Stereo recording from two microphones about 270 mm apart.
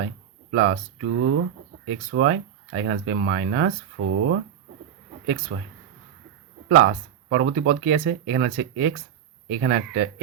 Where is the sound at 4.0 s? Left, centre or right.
Right.